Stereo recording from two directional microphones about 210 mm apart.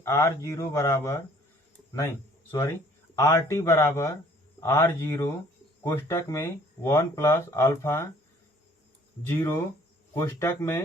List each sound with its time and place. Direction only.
0.0 s speech: 15° left (ahead or behind)
9.2 s speech: 10° left (ahead or behind)